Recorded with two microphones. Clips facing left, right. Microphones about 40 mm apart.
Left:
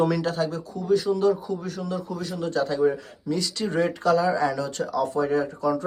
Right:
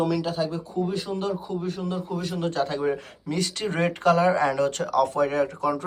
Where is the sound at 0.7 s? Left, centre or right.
Right.